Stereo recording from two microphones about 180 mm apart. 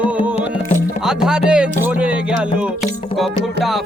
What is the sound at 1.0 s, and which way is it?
Music, 5° right (ahead or behind).